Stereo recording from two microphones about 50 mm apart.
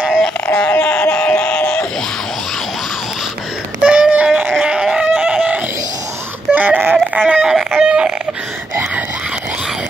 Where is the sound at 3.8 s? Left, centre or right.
Right.